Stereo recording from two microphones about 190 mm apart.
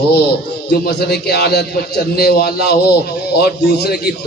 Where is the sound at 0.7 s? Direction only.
60° left (ahead or behind).